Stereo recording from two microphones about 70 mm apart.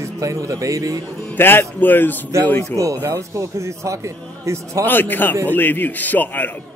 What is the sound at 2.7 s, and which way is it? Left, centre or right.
Speech, right.